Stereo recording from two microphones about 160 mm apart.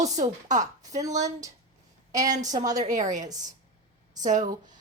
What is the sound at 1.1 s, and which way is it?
A woman's voice, 20° right (ahead or behind).